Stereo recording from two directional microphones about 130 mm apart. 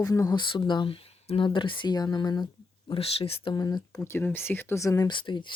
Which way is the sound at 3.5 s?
30° left (ahead or behind).